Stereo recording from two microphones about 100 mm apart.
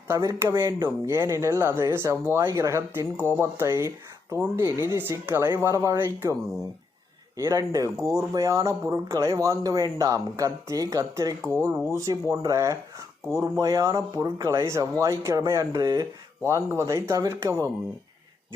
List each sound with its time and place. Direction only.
0.1 s speech: 30° right (ahead or behind)
7.3 s speech: 35° right (ahead or behind)